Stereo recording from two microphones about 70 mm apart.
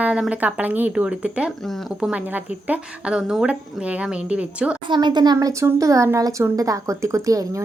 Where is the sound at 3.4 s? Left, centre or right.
Centre.